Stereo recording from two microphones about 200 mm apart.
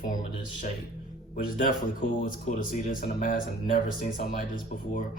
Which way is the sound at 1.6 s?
45° left (ahead or behind).